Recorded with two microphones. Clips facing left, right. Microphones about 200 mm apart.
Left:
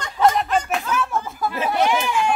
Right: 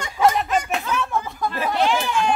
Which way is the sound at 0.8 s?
5° left (ahead or behind).